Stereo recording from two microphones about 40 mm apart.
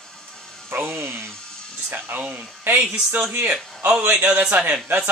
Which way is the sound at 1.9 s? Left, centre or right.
Right.